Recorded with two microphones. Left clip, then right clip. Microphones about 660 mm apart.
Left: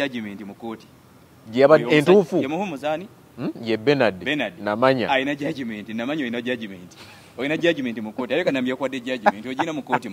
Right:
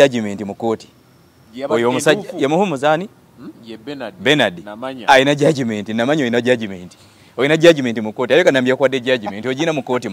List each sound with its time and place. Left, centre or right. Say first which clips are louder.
0.0 s a man's voice: right 14 dB; right
1.5 s a man's voice: left 10 dB; left
2.4 s speech: right 10 dB; right
3.4 s a man's voice: left 11 dB; left
4.2 s speech: right 11 dB; right
4.6 s a man's voice: left 9 dB; left
5.0 s a man's voice: right 11 dB; right